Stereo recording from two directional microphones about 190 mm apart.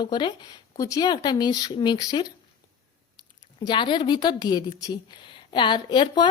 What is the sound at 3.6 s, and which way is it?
A woman's voice, 25° left (ahead or behind).